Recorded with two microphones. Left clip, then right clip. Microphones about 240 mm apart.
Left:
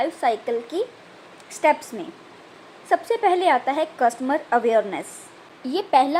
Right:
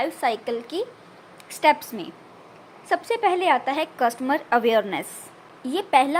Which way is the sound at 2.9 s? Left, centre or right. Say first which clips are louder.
Left 2 dB; right.